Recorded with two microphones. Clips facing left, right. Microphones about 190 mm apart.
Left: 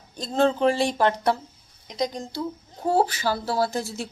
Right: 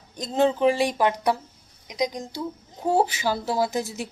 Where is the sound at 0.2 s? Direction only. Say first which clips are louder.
Even; 15° right (ahead or behind).